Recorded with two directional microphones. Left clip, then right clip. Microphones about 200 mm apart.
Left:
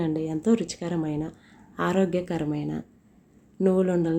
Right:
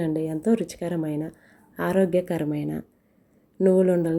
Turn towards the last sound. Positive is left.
turn(degrees=-10)  # may be behind; listen again after turning